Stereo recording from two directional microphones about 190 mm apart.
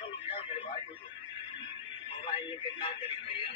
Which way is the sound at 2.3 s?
25° left (ahead or behind).